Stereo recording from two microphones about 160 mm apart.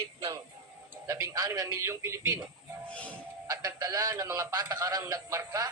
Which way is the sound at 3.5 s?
20° right (ahead or behind).